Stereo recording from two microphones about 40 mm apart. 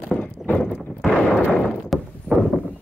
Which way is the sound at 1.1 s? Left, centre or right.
Left.